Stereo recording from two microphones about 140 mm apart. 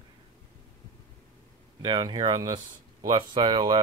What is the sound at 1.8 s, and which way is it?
Speech, 30° right (ahead or behind).